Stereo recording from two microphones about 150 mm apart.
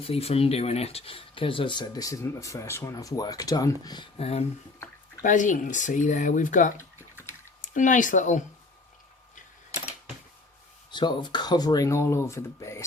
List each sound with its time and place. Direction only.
0.0 s speech: 40° left (ahead or behind)
4.2 s speech: 45° left (ahead or behind)
5.2 s speech: 60° left (ahead or behind)
10.9 s speech: 30° left (ahead or behind)